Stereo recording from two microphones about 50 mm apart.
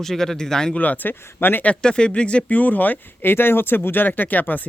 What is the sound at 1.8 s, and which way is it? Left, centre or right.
Speech, centre.